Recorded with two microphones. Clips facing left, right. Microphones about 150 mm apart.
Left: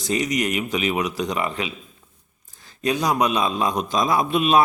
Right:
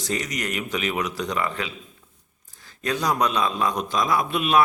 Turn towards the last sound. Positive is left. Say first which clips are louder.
# left 3 dB
turn(degrees=25)  # may be behind; listen again after turning